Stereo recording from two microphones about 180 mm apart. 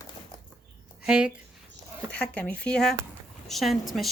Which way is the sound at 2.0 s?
5° left (ahead or behind).